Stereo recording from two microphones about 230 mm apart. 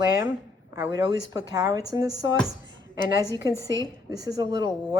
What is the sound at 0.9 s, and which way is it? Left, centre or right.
Speech, centre.